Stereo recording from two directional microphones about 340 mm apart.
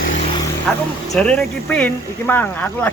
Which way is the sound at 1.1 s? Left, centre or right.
Centre.